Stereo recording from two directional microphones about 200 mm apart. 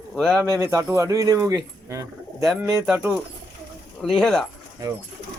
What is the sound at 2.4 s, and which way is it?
Speech, 5° right (ahead or behind).